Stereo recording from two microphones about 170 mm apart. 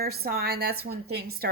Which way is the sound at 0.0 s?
65° right (ahead or behind).